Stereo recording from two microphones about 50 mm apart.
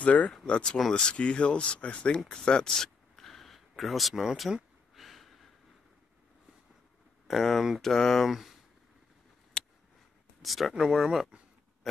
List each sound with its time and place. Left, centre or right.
0.0 s speech: left
0.7 s speech: centre
1.0 s speech: left; by 4.6 s centre
4.9 s snort: centre
7.2 s speech: centre
9.6 s a sound: centre
10.4 s speech: centre
10.7 s speech: centre